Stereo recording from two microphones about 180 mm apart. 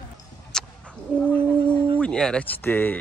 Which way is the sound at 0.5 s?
5° left (ahead or behind).